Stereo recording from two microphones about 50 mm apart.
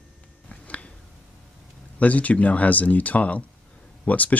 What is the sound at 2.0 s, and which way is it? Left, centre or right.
Speech, left.